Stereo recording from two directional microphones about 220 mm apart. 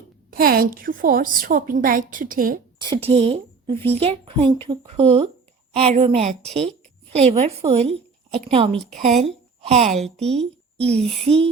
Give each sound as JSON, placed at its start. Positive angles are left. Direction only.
{"t": 0.3, "sound": "a woman's voice", "side_deg": -40}
{"t": 2.8, "sound": "speech", "side_deg": -25}
{"t": 3.8, "sound": "speech", "side_deg": 10}
{"t": 4.0, "sound": "a woman's voice", "side_deg": -25}
{"t": 9.2, "sound": "a sound", "side_deg": -30}
{"t": 9.9, "sound": "a woman's voice", "side_deg": 0}
{"t": 10.8, "sound": "speech", "side_deg": -25}